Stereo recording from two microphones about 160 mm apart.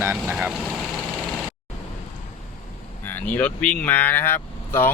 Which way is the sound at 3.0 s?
10° left (ahead or behind).